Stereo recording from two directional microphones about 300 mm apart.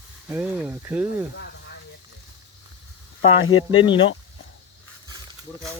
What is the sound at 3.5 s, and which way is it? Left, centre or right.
Speech, centre.